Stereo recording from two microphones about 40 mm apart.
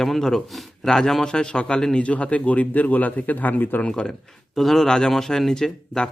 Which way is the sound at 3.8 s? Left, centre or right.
Left.